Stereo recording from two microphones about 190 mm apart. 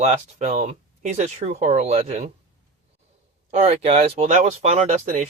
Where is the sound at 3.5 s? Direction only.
35° right (ahead or behind).